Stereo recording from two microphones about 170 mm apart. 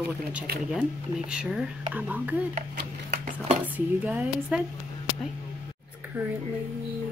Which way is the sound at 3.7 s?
10° right (ahead or behind).